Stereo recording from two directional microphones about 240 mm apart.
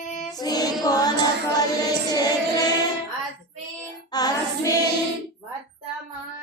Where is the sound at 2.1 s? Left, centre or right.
Centre.